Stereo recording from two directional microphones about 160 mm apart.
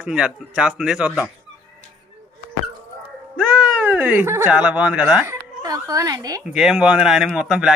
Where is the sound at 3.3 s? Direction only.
10° right (ahead or behind).